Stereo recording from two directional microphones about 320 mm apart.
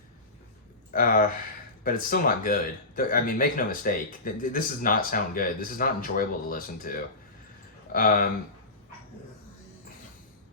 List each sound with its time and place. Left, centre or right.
0.9 s speech: left